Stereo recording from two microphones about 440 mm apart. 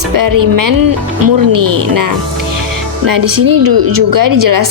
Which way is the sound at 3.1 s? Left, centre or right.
Right.